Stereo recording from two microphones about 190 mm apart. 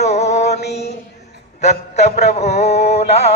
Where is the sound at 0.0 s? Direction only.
35° left (ahead or behind).